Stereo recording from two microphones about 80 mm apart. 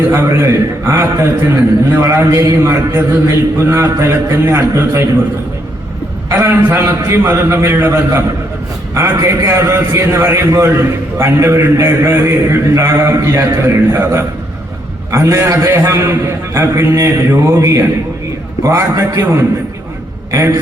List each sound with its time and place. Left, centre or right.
0.1 s a man's voice: right
6.3 s a man's voice: right
9.2 s a man's voice: right